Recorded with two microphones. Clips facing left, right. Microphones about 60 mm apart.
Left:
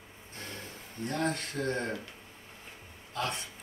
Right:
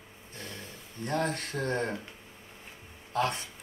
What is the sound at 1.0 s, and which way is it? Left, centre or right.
Speech, right.